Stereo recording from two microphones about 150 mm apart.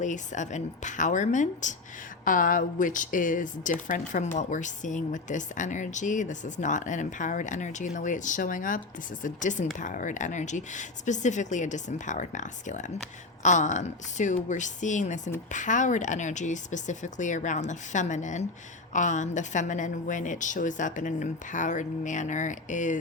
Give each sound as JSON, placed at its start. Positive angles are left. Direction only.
{"t": 0.0, "sound": "speech", "side_deg": 55}